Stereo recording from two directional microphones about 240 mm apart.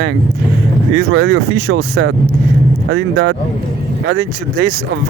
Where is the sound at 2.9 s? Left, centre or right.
Right.